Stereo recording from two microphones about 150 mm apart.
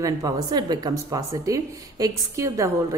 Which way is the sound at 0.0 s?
25° right (ahead or behind).